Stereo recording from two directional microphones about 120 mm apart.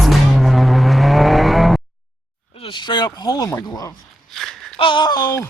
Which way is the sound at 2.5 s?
45° left (ahead or behind).